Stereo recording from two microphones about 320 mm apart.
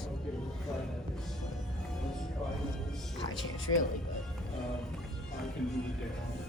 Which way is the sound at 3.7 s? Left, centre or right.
Left.